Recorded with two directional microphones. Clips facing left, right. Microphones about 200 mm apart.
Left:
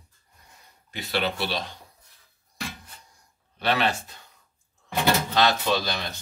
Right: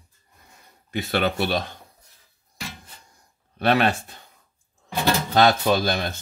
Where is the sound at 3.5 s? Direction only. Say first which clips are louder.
Right 5 dB; 50° right (ahead or behind).